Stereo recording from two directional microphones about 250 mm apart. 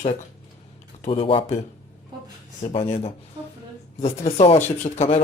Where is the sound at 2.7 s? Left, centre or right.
Left.